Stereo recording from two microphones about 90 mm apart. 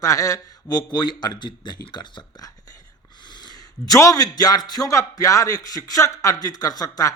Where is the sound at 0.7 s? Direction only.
50° left (ahead or behind).